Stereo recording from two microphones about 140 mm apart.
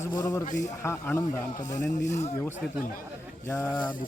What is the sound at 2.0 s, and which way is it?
Speech, 60° left (ahead or behind).